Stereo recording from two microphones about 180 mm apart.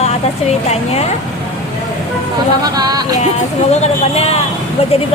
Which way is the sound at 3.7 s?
35° left (ahead or behind).